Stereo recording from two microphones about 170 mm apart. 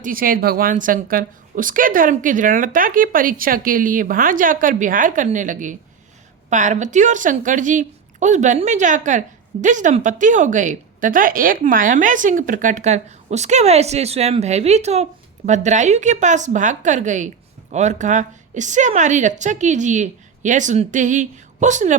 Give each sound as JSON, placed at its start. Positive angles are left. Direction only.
{"t": 0.0, "sound": "a woman's voice", "side_deg": -55}